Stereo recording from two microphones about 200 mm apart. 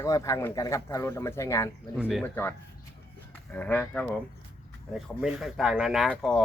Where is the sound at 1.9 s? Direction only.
5° right (ahead or behind).